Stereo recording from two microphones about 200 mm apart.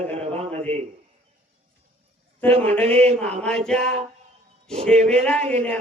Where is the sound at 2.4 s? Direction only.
10° left (ahead or behind).